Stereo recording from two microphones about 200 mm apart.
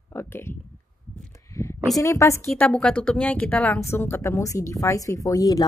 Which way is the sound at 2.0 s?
15° left (ahead or behind).